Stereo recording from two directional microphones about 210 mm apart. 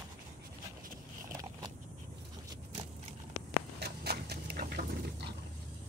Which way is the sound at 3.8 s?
50° right (ahead or behind).